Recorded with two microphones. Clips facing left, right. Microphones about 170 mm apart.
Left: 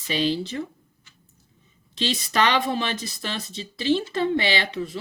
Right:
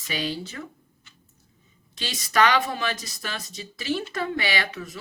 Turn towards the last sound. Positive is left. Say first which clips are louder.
# left 3 dB
turn(degrees=30)  # may be behind; listen again after turning